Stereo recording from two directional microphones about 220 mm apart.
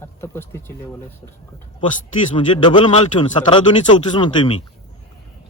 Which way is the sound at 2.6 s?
25° left (ahead or behind).